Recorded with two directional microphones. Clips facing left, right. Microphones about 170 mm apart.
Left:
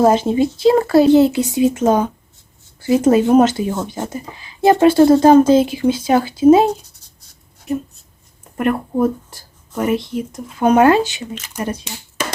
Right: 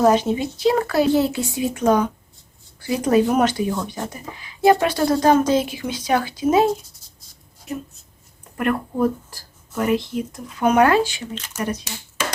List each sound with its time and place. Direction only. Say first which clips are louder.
0.0 s speech: left 4 dB; 30° left (ahead or behind)
8.5 s speech: left 4 dB; 25° left (ahead or behind)